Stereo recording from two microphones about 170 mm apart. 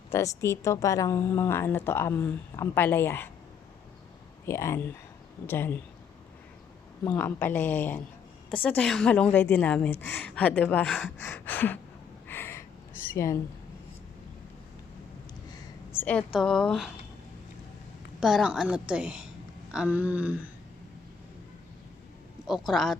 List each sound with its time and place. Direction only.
0.1 s a woman's voice: 15° left (ahead or behind)
4.4 s a woman's voice: 15° left (ahead or behind)
7.0 s a woman's voice: 10° left (ahead or behind)
12.3 s a sound: 15° left (ahead or behind)
13.1 s a woman's voice: 15° left (ahead or behind)
15.9 s a sound: 10° left (ahead or behind)
16.4 s a woman's voice: 5° left (ahead or behind)
18.2 s a woman's voice: centre (ahead or behind)
19.7 s a sound: 10° right (ahead or behind)
22.4 s a woman's voice: centre (ahead or behind)